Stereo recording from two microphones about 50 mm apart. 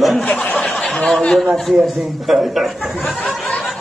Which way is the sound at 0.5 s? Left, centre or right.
Left.